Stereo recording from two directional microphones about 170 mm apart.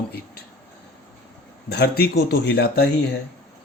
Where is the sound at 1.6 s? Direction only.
70° left (ahead or behind).